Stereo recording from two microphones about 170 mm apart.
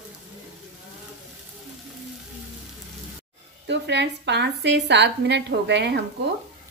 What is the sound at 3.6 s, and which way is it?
A woman's voice, 90° right.